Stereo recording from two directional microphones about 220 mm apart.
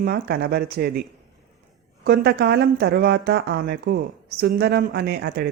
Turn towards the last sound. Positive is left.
turn(degrees=-45)  # may be behind; listen again after turning